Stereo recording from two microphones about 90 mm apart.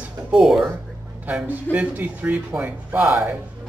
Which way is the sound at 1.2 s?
20° right (ahead or behind).